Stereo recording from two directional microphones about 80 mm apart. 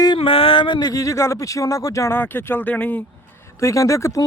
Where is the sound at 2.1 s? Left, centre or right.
Left.